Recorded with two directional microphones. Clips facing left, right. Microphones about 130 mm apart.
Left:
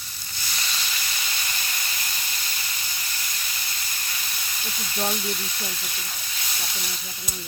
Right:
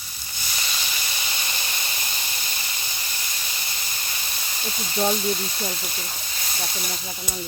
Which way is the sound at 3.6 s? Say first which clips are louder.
Right 1 dB; 25° right (ahead or behind).